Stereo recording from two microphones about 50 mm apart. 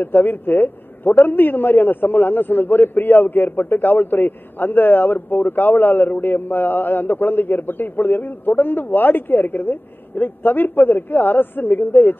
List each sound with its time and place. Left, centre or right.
0.0 s a man's voice: left